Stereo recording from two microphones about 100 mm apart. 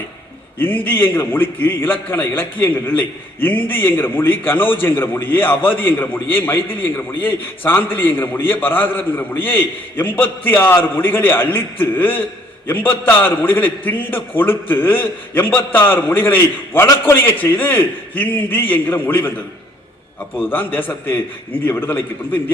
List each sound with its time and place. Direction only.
0.6 s a man's voice: 20° left (ahead or behind)
20.4 s a man's voice: 20° left (ahead or behind)